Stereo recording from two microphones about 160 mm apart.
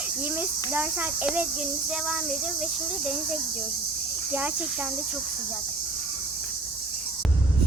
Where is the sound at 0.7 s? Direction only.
10° right (ahead or behind).